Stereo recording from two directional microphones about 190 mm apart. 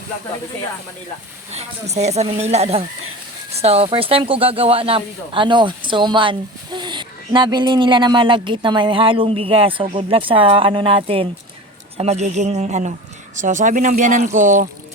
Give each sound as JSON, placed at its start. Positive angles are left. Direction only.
{"t": 1.5, "sound": "speech", "side_deg": -35}